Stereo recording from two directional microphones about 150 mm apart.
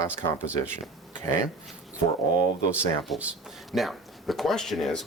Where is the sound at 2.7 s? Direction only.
5° right (ahead or behind).